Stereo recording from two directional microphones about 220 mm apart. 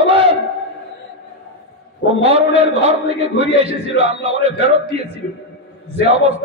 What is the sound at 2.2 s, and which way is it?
A man's voice, 25° right (ahead or behind).